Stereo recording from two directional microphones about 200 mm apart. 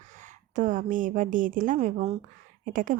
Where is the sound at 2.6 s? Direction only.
40° right (ahead or behind).